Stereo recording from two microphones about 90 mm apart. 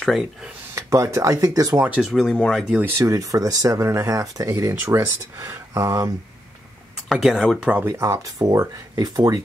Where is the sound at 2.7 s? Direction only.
15° right (ahead or behind).